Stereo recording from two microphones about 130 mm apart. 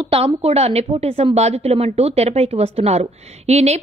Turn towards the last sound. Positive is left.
turn(degrees=-55)  # may be behind; listen again after turning